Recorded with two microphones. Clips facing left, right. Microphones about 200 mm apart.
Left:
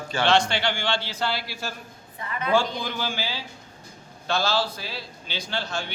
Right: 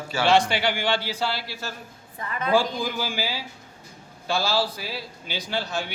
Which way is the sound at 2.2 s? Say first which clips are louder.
Right 1 dB; 40° right (ahead or behind).